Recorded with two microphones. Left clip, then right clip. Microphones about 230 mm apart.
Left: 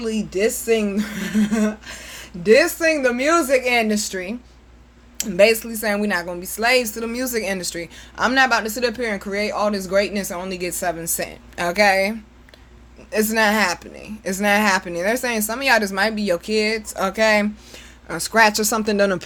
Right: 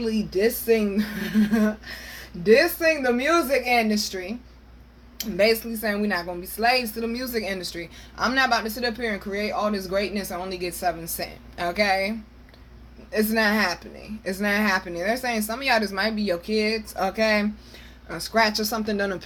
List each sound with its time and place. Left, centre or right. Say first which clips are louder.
0.0 s a woman's voice: left 2 dB; left
5.4 s a woman's voice: left 6 dB; left
13.1 s speech: left 4 dB; left
18.1 s a woman's voice: left 6 dB; left